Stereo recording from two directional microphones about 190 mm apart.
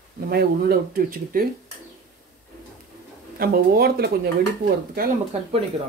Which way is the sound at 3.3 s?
55° right (ahead or behind).